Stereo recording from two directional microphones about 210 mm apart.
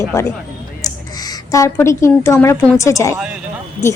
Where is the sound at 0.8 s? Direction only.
15° left (ahead or behind).